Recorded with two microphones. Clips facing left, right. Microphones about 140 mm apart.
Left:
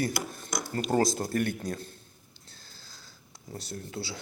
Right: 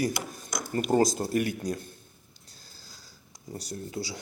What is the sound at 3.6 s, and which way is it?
Speech, 45° right (ahead or behind).